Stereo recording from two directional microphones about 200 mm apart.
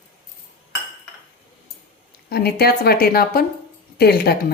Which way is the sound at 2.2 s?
50° left (ahead or behind).